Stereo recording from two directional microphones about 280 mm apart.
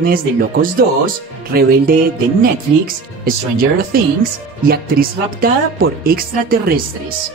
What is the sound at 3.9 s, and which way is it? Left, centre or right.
Speech, right.